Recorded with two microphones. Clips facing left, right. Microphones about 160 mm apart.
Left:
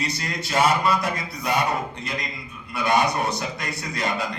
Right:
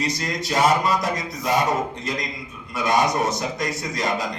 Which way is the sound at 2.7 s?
40° right (ahead or behind).